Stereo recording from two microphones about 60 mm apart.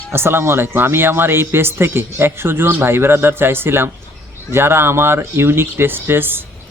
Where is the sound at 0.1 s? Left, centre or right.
Right.